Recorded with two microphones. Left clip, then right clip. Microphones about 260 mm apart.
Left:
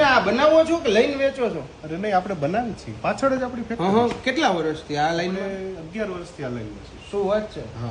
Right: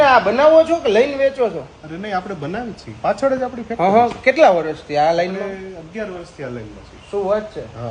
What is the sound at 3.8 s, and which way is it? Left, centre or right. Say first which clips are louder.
Speech: right 7 dB; right.